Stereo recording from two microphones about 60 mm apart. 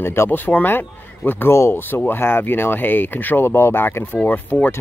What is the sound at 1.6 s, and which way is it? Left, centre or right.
Speech, left.